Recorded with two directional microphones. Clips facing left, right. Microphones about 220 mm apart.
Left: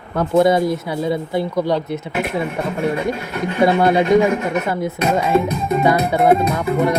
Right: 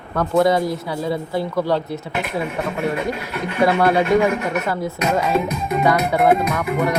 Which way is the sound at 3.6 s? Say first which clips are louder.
Left 2 dB; 20° left (ahead or behind).